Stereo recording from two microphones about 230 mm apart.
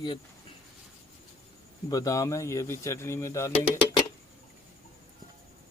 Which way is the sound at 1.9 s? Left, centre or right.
Centre.